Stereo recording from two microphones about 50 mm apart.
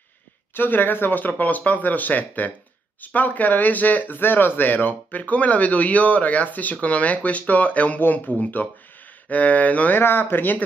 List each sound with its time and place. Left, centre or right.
0.6 s speech: left
9.9 s speech: left